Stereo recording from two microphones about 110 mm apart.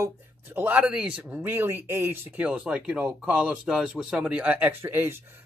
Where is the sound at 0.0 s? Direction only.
20° right (ahead or behind).